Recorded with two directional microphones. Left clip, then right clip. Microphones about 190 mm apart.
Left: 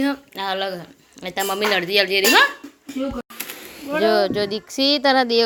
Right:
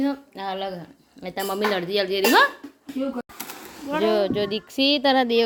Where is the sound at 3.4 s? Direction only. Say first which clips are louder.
Left 2 dB; 5° right (ahead or behind).